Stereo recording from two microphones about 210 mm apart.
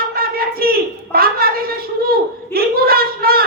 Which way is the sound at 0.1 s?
45° right (ahead or behind).